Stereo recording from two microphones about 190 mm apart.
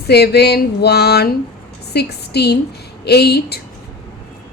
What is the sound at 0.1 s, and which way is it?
Speech, 60° left (ahead or behind).